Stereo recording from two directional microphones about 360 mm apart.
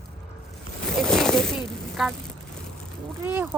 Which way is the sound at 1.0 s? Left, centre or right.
Centre.